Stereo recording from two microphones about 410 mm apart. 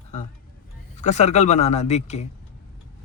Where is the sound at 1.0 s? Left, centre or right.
Centre.